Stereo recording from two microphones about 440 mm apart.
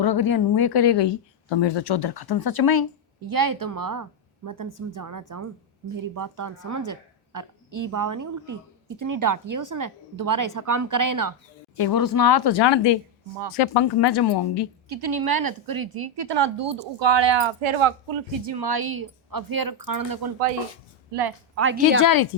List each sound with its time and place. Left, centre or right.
0.0 s speech: left
3.2 s speech: right
11.8 s speech: left
13.5 s speech: left
14.8 s a woman's voice: right
21.5 s speech: right
22.0 s speech: left